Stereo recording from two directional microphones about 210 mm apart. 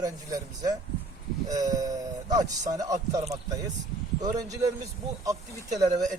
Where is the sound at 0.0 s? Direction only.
20° right (ahead or behind).